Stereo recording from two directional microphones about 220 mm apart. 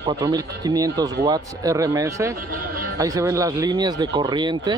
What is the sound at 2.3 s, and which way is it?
Speech, 40° right (ahead or behind).